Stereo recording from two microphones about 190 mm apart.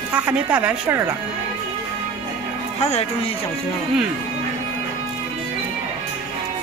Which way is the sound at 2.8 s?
35° left (ahead or behind).